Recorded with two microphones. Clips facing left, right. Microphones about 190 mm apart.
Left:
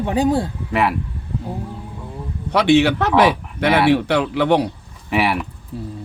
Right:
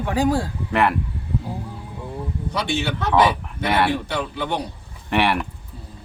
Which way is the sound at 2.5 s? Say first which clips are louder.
Left 12 dB; 70° left (ahead or behind).